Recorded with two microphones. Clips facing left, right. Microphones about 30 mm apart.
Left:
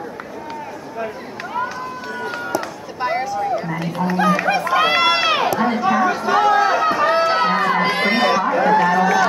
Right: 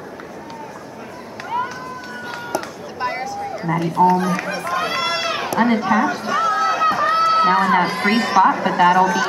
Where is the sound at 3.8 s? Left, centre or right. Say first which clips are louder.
Right 6 dB; centre.